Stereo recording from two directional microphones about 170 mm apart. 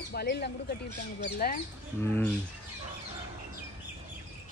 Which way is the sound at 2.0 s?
10° left (ahead or behind).